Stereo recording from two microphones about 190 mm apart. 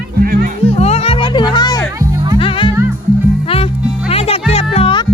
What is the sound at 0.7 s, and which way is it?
Music, 35° left (ahead or behind).